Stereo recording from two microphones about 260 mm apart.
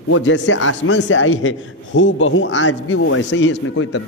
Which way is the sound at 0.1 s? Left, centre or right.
Left.